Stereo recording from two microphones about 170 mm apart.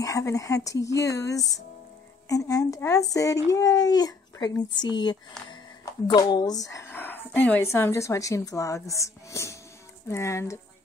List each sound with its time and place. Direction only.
0.0 s a woman's voice: 20° left (ahead or behind)